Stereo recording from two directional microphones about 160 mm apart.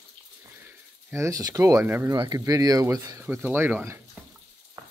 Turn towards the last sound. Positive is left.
turn(degrees=-10)  # may be behind; listen again after turning